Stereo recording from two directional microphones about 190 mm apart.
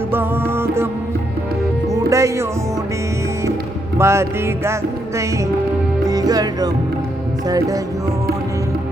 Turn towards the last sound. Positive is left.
turn(degrees=-20)  # may be behind; listen again after turning